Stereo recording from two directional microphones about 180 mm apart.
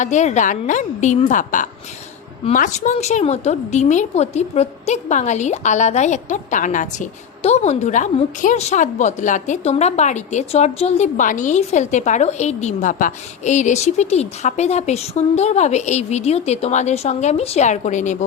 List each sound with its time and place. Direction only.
0.0 s a woman's voice: 40° left (ahead or behind)